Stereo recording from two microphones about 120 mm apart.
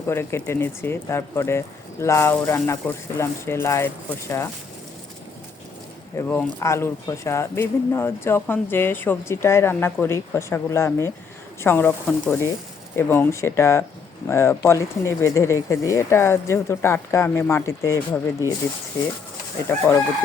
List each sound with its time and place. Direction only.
0.1 s speech: 20° left (ahead or behind)
6.1 s speech: 20° left (ahead or behind)